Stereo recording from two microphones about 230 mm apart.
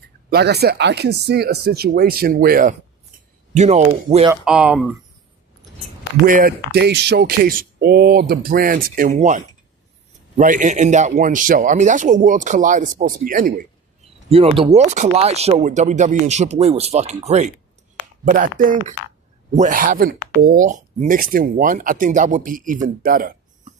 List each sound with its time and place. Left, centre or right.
0.3 s speech: right
4.4 s speech: centre
6.2 s speech: right
14.3 s speech: right